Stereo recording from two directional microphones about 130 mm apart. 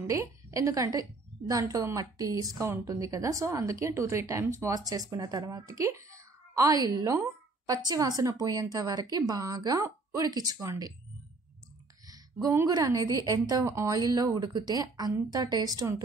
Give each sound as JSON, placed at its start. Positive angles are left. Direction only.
{"t": 0.0, "sound": "a woman's voice", "side_deg": -25}
{"t": 12.1, "sound": "speech", "side_deg": -30}